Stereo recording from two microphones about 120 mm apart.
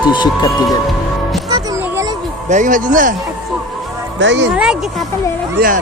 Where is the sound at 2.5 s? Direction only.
90° right.